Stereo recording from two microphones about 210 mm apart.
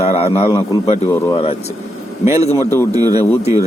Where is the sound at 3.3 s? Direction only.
30° left (ahead or behind).